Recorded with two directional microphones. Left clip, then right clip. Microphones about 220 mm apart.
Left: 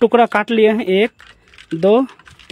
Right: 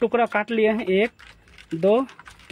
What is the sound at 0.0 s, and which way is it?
Speech, 50° left (ahead or behind).